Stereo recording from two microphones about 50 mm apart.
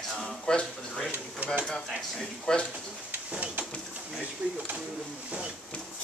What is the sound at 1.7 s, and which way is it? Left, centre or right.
Speech, centre.